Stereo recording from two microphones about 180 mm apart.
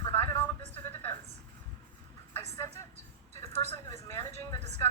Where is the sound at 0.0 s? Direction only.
15° left (ahead or behind).